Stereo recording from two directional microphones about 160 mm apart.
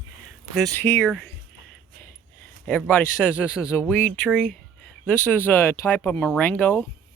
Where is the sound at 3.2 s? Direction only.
5° left (ahead or behind).